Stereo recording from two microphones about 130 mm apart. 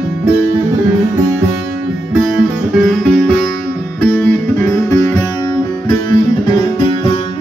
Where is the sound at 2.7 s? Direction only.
Centre (ahead or behind).